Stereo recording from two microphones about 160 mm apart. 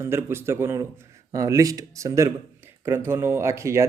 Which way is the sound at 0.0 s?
15° right (ahead or behind).